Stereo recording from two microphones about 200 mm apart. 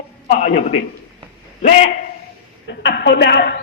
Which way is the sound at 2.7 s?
60° left (ahead or behind).